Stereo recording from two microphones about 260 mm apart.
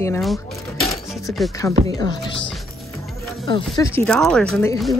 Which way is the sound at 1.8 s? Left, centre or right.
Centre.